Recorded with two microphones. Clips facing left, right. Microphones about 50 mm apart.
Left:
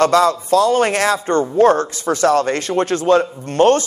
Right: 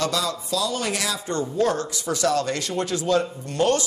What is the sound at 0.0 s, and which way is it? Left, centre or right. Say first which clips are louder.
A man's voice: left 12 dB; left.